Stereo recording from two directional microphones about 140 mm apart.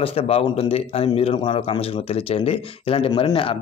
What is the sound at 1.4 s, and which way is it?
Speech, 35° left (ahead or behind).